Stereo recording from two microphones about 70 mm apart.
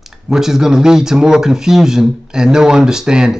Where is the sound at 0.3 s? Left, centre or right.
Centre.